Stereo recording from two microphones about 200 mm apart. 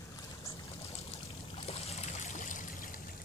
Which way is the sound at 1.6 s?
30° left (ahead or behind).